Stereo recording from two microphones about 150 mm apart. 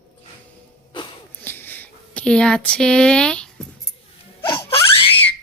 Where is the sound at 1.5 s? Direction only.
15° left (ahead or behind).